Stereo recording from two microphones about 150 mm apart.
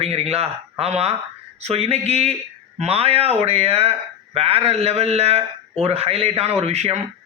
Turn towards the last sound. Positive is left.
turn(degrees=-45)  # may be behind; listen again after turning